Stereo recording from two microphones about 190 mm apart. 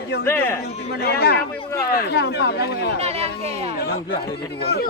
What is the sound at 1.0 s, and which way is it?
Speech, 55° left (ahead or behind).